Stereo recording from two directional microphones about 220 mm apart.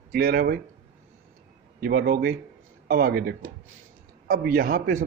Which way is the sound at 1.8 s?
40° right (ahead or behind).